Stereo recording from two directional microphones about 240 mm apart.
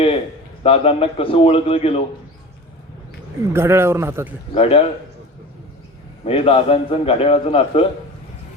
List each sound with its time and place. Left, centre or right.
0.6 s a man's voice: left
3.5 s a man's voice: centre
4.5 s a man's voice: left
6.2 s a man's voice: left